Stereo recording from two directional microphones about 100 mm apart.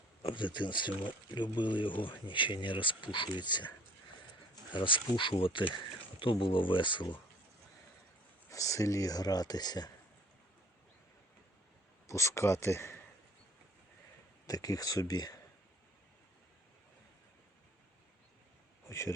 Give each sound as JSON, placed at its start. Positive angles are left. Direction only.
{"t": 0.2, "sound": "speech", "side_deg": 60}
{"t": 4.7, "sound": "speech", "side_deg": 55}
{"t": 8.4, "sound": "speech", "side_deg": 35}
{"t": 12.0, "sound": "speech", "side_deg": 30}
{"t": 14.4, "sound": "speech", "side_deg": 35}
{"t": 18.9, "sound": "a man's voice", "side_deg": 30}